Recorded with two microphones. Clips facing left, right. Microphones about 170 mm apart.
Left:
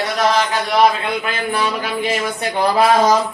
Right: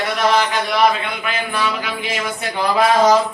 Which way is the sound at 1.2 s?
40° left (ahead or behind).